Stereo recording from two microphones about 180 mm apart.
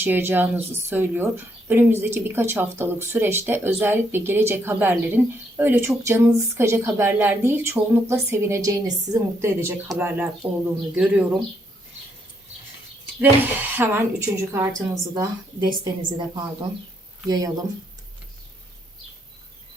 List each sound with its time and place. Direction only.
0.0 s a woman's voice: 10° right (ahead or behind)
13.1 s a woman's voice: 10° right (ahead or behind)